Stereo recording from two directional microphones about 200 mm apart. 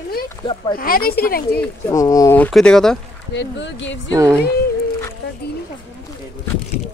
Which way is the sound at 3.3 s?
65° left (ahead or behind).